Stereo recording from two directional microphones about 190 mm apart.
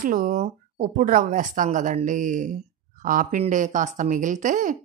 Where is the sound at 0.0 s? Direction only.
45° right (ahead or behind).